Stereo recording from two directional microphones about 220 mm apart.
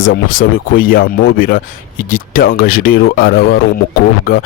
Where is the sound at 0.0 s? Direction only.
40° left (ahead or behind).